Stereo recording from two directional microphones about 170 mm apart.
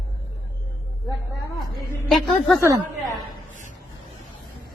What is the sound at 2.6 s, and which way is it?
Speech, 20° right (ahead or behind).